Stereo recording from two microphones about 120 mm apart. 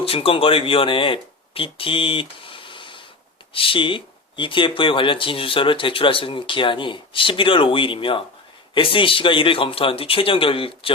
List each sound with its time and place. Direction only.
0.0 s speech: 50° left (ahead or behind)